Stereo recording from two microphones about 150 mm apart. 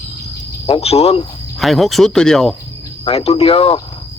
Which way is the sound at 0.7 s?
40° left (ahead or behind).